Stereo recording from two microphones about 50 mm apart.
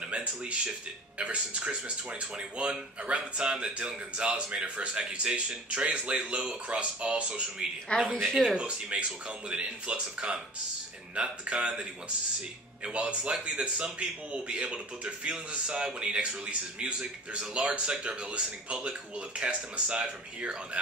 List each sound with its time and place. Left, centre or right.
0.1 s speech: right
7.9 s speech: left
8.5 s speech: right